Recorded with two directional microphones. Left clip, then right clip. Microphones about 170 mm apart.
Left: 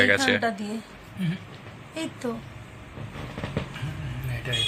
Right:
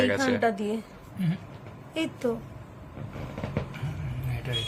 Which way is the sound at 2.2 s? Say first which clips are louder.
Right 4 dB; 35° right (ahead or behind).